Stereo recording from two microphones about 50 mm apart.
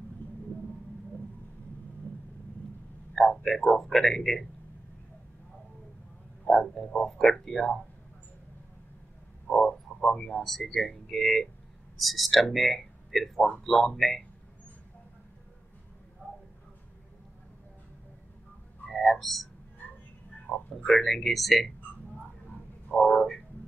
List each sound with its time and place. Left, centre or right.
3.2 s speech: centre
6.4 s frog: centre
7.1 s speech: centre
9.5 s frog: centre
9.9 s speech: centre
16.2 s a sound: right
18.9 s speech: centre
20.5 s a sound: left
20.8 s speech: centre
22.8 s a sound: centre